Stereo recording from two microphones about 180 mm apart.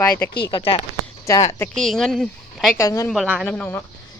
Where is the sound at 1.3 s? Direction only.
15° left (ahead or behind).